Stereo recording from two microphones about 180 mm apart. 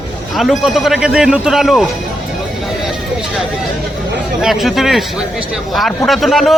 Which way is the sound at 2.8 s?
Centre (ahead or behind).